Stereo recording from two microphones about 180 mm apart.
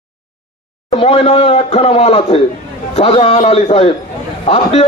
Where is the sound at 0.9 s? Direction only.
35° left (ahead or behind).